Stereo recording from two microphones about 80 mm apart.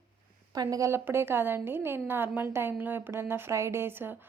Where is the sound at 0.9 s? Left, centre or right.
Right.